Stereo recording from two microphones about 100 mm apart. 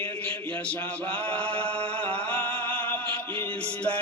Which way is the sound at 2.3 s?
15° left (ahead or behind).